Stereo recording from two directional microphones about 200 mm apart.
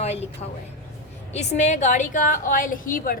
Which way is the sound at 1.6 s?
35° left (ahead or behind).